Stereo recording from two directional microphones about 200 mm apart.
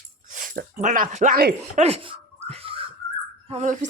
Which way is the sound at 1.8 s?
30° right (ahead or behind).